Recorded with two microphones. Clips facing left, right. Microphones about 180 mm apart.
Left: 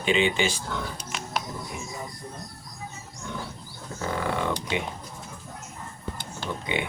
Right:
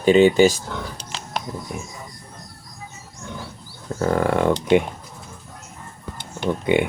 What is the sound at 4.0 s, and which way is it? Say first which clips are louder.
Speech: right 9 dB; 55° right (ahead or behind).